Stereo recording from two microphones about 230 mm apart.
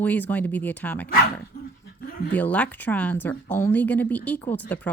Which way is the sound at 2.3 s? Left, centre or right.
Centre.